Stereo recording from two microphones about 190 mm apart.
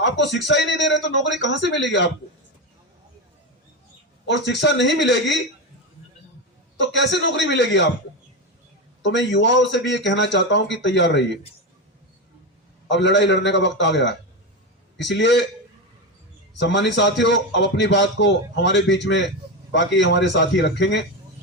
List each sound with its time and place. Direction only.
0.3 s a man's voice: 65° left (ahead or behind)
4.3 s a man's voice: 65° left (ahead or behind)
6.7 s a man's voice: 70° left (ahead or behind)
9.0 s a man's voice: 70° left (ahead or behind)
12.9 s a man's voice: 70° left (ahead or behind)
16.6 s a man's voice: 70° left (ahead or behind)